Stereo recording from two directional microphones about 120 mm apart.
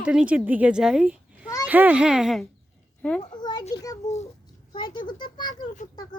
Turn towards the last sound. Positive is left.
turn(degrees=40)  # may be behind; listen again after turning